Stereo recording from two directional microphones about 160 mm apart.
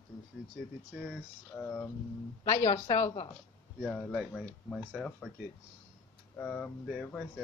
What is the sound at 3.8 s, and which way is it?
Speech, 5° left (ahead or behind).